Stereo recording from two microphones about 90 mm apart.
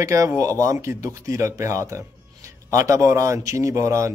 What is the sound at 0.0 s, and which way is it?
A man's voice, 30° right (ahead or behind).